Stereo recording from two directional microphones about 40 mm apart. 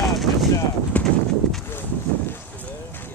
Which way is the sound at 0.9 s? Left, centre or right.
Left.